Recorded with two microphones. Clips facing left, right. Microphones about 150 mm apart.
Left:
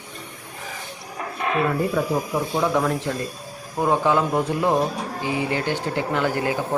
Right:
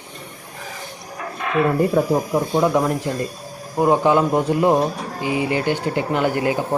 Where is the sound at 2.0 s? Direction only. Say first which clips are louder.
Right 5 dB; 40° right (ahead or behind).